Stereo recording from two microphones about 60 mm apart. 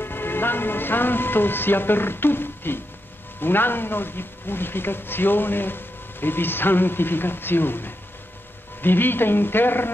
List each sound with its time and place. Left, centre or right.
0.0 s speech: left